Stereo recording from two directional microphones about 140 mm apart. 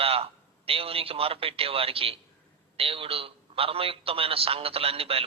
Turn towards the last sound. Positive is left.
turn(degrees=-45)  # may be behind; listen again after turning